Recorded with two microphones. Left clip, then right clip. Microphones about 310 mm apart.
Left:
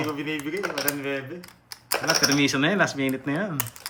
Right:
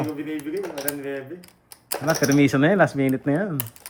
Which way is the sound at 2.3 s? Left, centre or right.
Centre.